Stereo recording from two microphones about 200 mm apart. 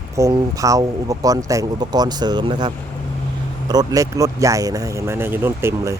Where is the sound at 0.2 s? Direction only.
15° right (ahead or behind).